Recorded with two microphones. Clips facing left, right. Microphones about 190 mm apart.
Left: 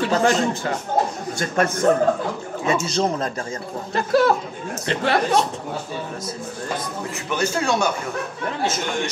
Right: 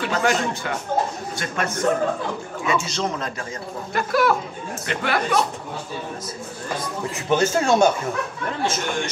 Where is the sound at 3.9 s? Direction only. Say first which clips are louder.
Left 2 dB; 30° left (ahead or behind).